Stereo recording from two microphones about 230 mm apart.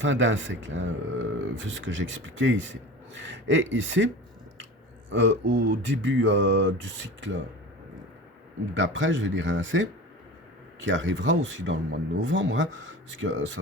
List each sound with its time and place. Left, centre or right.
0.0 s speech: right
8.7 s speech: right
10.8 s speech: right